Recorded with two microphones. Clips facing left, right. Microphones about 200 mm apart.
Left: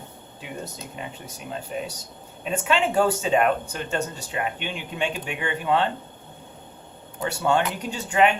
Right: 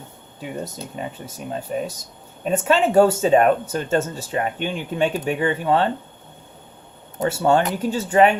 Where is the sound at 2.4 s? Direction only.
40° right (ahead or behind).